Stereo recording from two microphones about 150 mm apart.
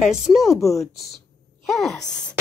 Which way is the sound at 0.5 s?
20° left (ahead or behind).